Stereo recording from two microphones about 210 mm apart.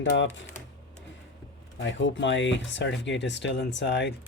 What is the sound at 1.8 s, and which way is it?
Speech, 60° left (ahead or behind).